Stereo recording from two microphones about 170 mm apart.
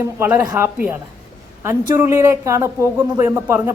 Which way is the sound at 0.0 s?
15° right (ahead or behind).